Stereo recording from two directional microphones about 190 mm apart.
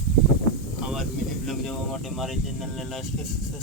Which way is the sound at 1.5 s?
Centre (ahead or behind).